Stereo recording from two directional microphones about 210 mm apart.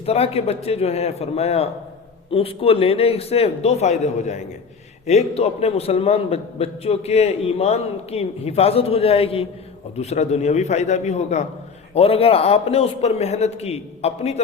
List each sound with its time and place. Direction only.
0.0 s a man's voice: 30° left (ahead or behind)